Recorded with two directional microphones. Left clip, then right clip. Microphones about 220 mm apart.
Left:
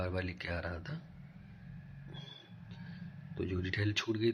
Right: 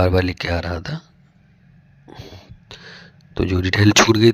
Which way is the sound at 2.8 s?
50° right (ahead or behind).